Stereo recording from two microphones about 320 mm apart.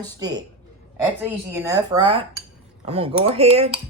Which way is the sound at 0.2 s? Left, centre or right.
Centre.